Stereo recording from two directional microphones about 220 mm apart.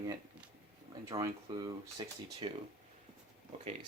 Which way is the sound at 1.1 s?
15° right (ahead or behind).